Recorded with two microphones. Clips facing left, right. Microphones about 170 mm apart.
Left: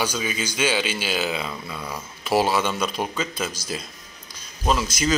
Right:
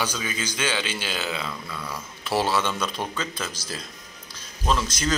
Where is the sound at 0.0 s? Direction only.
10° left (ahead or behind).